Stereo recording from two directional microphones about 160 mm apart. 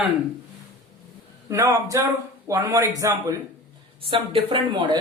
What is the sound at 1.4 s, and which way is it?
Speech, 20° right (ahead or behind).